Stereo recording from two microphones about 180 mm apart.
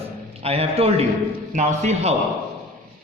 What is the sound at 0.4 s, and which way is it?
A man's voice, 35° right (ahead or behind).